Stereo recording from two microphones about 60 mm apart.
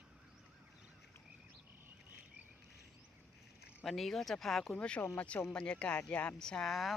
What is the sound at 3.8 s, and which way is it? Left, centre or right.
Speech, centre.